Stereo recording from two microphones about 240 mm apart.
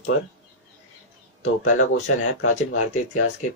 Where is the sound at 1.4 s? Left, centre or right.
Left.